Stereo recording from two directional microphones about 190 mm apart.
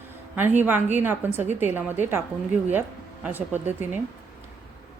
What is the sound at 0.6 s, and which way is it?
A woman's voice, 10° right (ahead or behind).